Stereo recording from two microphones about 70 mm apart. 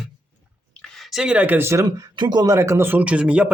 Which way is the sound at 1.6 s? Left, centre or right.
Right.